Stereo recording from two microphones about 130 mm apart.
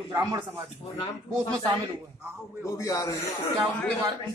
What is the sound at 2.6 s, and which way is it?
Speech, 25° left (ahead or behind).